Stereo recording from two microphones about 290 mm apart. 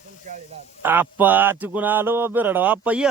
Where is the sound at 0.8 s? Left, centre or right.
Centre.